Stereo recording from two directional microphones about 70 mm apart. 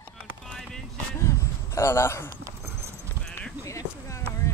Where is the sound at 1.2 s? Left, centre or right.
Left.